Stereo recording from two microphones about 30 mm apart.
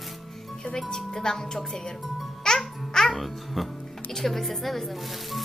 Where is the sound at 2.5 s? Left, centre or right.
Left.